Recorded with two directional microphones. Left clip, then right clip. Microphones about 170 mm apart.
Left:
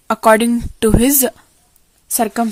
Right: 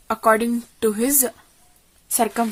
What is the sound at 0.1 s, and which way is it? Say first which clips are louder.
Speech: left 6 dB; 65° left (ahead or behind).